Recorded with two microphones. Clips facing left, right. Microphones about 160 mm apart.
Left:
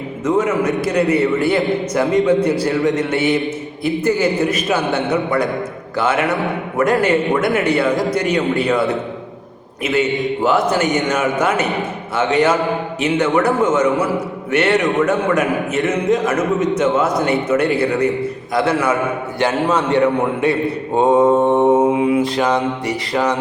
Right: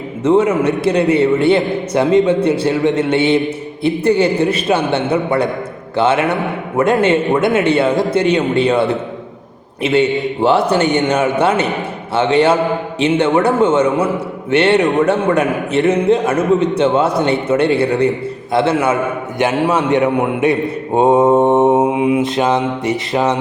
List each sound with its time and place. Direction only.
0.3 s a man's voice: 30° right (ahead or behind)